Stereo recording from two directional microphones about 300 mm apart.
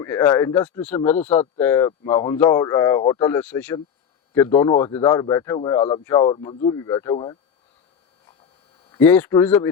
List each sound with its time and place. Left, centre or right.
0.0 s speech: centre
9.0 s speech: centre